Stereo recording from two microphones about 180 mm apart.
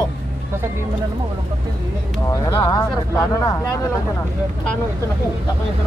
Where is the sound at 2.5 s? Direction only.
20° left (ahead or behind).